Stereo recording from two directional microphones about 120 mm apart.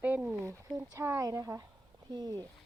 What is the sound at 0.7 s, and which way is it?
Speech, 25° right (ahead or behind).